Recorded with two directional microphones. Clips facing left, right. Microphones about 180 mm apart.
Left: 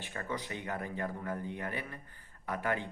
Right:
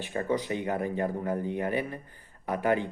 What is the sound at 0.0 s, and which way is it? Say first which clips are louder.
Speech: right 10 dB; 25° right (ahead or behind).